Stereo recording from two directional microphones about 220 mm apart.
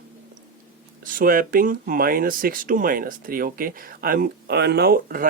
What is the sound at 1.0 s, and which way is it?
Speech, 40° right (ahead or behind).